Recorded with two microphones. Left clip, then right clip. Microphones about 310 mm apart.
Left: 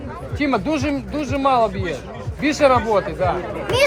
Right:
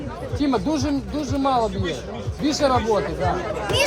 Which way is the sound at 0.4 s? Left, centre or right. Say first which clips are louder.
Left 2 dB; left.